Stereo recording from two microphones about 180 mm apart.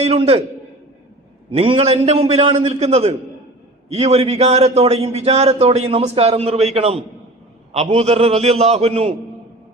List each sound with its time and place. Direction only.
0.0 s a man's voice: 35° right (ahead or behind)
1.5 s a man's voice: 30° right (ahead or behind)